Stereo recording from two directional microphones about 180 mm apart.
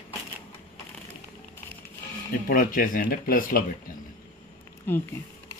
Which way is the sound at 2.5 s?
50° left (ahead or behind).